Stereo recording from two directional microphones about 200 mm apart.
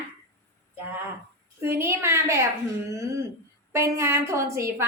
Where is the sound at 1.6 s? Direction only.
10° right (ahead or behind).